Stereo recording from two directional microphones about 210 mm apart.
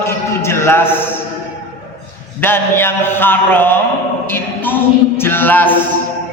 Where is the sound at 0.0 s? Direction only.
10° left (ahead or behind).